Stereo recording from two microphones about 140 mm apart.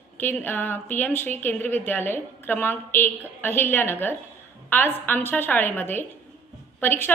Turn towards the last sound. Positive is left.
turn(degrees=15)  # may be behind; listen again after turning